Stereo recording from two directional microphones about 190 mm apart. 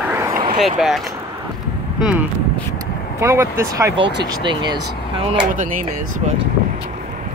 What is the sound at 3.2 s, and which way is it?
Speech, 15° right (ahead or behind).